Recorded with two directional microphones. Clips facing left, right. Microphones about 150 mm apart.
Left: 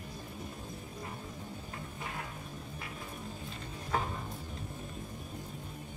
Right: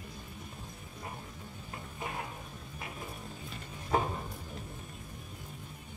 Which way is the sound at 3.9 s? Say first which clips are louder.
Right 4 dB; 20° right (ahead or behind).